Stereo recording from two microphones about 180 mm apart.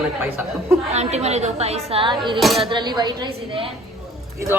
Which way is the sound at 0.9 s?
35° right (ahead or behind).